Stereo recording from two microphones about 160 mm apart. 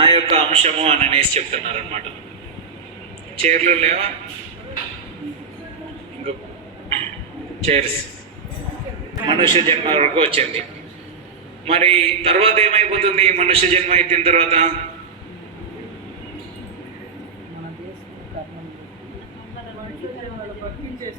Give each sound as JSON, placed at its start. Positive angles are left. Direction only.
{"t": 0.0, "sound": "a man's voice", "side_deg": -35}
{"t": 3.3, "sound": "a man's voice", "side_deg": -45}
{"t": 7.6, "sound": "a man's voice", "side_deg": -40}
{"t": 9.2, "sound": "a man's voice", "side_deg": -30}
{"t": 11.6, "sound": "a man's voice", "side_deg": -35}